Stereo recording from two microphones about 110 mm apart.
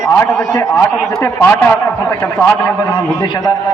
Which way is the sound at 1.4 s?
15° left (ahead or behind).